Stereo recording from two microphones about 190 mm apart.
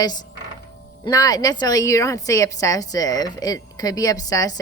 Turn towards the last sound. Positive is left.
turn(degrees=20)  # may be behind; listen again after turning